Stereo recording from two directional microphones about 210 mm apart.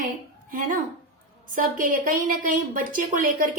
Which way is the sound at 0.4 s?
40° right (ahead or behind).